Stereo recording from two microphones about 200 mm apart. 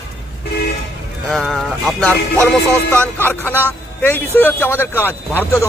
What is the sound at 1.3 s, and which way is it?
Speech, centre (ahead or behind).